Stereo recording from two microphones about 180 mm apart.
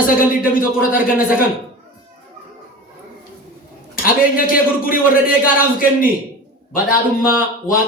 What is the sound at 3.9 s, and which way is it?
A man's voice, 50° left (ahead or behind).